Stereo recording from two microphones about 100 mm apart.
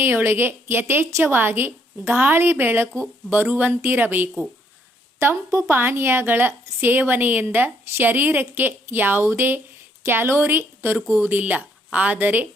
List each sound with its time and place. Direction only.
0.0 s a woman's voice: 25° right (ahead or behind)